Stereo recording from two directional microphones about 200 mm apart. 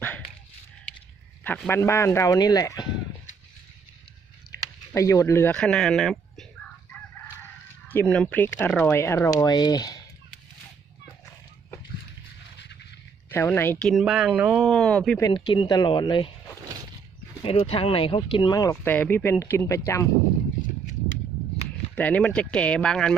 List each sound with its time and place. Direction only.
1.5 s speech: 10° left (ahead or behind)
4.9 s speech: 15° left (ahead or behind)
6.9 s chicken: 10° left (ahead or behind)
8.5 s speech: 10° left (ahead or behind)
12.5 s a sound: 60° left (ahead or behind)
13.3 s speech: 10° left (ahead or behind)
15.2 s speech: 20° left (ahead or behind)
17.4 s speech: 25° left (ahead or behind)
21.9 s speech: 5° left (ahead or behind)